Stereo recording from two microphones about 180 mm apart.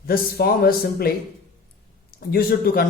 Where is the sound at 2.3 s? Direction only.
55° left (ahead or behind).